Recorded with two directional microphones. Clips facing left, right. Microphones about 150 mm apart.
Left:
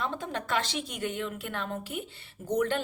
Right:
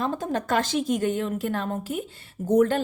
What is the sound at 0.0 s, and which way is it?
A woman's voice, 40° right (ahead or behind).